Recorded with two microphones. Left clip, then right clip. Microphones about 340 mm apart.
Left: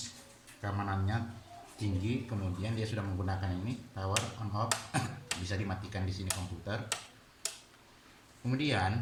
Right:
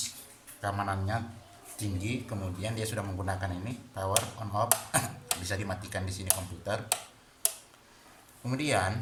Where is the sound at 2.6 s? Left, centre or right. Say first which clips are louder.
Right 5 dB; right.